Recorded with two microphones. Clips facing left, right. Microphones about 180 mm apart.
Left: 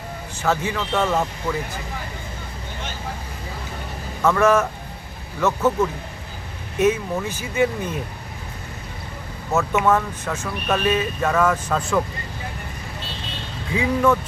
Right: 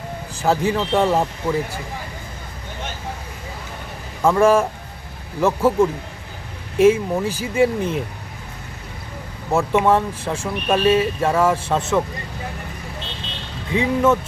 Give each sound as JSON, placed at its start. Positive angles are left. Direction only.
{"t": 0.4, "sound": "speech", "side_deg": -35}
{"t": 4.2, "sound": "speech", "side_deg": -30}
{"t": 9.7, "sound": "speech", "side_deg": -30}
{"t": 13.7, "sound": "speech", "side_deg": -25}